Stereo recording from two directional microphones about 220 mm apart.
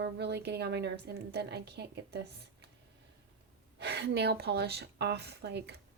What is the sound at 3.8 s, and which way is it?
A woman's voice, 50° right (ahead or behind).